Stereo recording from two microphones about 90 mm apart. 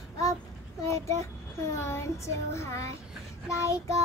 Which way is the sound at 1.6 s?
30° left (ahead or behind).